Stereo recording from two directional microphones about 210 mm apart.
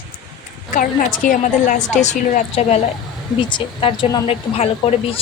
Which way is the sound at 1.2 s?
40° left (ahead or behind).